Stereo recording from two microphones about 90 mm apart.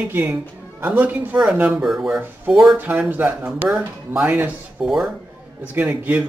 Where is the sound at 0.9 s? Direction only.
15° right (ahead or behind).